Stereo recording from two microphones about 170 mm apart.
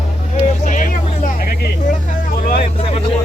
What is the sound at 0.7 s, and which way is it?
Vehicle, 50° left (ahead or behind).